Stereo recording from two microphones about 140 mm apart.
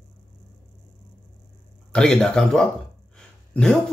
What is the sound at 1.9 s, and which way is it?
A man's voice, 5° left (ahead or behind).